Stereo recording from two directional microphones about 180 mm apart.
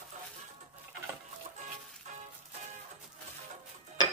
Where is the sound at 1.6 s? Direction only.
40° right (ahead or behind).